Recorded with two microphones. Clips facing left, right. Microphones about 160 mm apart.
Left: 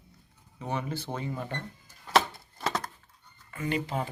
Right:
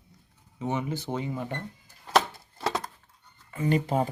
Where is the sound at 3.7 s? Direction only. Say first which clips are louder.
Right 6 dB; 45° right (ahead or behind).